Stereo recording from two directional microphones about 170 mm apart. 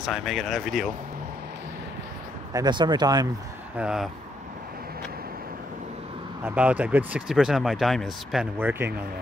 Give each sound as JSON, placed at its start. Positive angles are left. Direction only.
{"t": 0.0, "sound": "speech", "side_deg": 0}
{"t": 2.5, "sound": "speech", "side_deg": -25}
{"t": 3.7, "sound": "speech", "side_deg": -5}
{"t": 6.4, "sound": "speech", "side_deg": -10}